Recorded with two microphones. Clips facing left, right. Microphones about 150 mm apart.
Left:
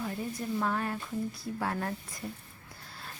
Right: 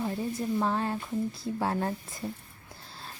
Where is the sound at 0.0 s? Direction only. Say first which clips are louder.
Right 4 dB; 25° right (ahead or behind).